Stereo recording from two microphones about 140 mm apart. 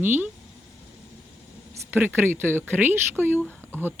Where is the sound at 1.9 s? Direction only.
15° right (ahead or behind).